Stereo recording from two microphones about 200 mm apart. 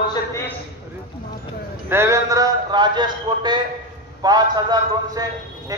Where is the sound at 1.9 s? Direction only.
15° right (ahead or behind).